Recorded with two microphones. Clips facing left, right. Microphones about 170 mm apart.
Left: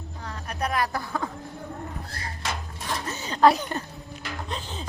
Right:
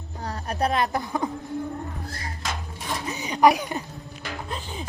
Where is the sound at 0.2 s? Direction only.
35° right (ahead or behind); by 1.3 s 20° right (ahead or behind).